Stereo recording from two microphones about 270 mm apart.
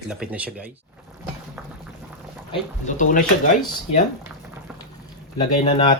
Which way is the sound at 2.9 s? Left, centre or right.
Left.